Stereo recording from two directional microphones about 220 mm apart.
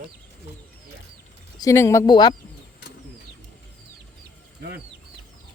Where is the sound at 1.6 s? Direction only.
15° left (ahead or behind).